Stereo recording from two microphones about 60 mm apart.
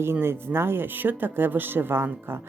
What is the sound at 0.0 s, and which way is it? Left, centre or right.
Speech, right.